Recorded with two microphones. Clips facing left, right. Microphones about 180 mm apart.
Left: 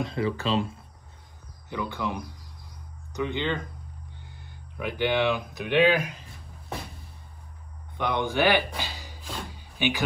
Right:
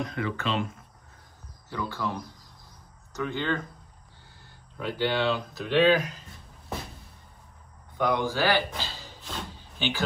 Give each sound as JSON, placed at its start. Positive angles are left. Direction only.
{"t": 0.0, "sound": "speech", "side_deg": 30}
{"t": 1.7, "sound": "speech", "side_deg": 15}
{"t": 8.1, "sound": "speech", "side_deg": 20}